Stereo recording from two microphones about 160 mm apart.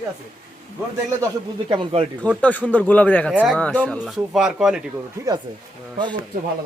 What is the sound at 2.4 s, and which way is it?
Speech, 10° left (ahead or behind).